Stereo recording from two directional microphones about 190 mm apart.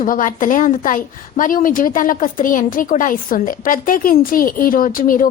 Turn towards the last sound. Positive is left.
turn(degrees=45)  # may be behind; listen again after turning